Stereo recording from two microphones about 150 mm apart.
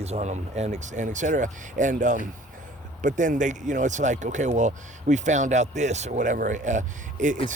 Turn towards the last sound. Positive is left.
turn(degrees=-55)  # may be behind; listen again after turning